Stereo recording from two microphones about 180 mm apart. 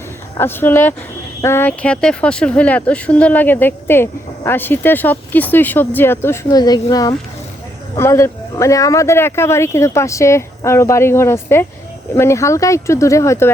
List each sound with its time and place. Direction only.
0.3 s speech: 10° left (ahead or behind)